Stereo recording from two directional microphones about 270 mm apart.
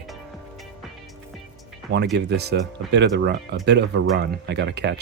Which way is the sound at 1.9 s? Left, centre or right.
Right.